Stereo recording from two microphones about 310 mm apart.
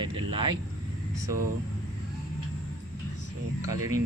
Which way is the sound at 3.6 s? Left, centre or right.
Centre.